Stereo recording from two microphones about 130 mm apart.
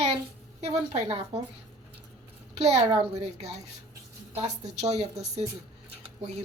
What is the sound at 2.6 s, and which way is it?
Speech, 55° right (ahead or behind).